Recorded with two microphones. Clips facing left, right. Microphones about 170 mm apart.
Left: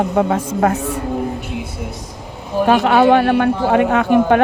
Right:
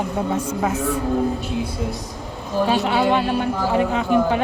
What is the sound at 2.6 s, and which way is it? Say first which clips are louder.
Speech: left 7 dB; 55° left (ahead or behind).